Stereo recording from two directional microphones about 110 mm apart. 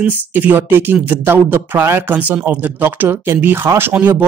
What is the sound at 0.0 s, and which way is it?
Speech, 15° right (ahead or behind).